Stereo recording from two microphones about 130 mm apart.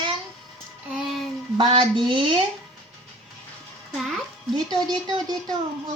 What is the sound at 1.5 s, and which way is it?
Speech, 40° right (ahead or behind).